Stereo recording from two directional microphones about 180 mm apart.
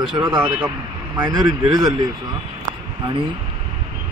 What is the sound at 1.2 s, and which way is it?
Speech, 20° right (ahead or behind).